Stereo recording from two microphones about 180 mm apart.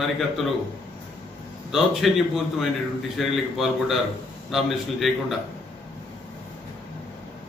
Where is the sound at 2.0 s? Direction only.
Centre (ahead or behind).